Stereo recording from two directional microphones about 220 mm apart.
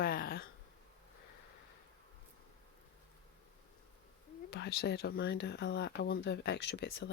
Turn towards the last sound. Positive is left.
turn(degrees=50)  # may be behind; listen again after turning